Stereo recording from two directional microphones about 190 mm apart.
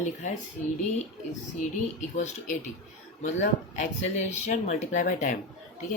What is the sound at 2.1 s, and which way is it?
Speech, 40° left (ahead or behind).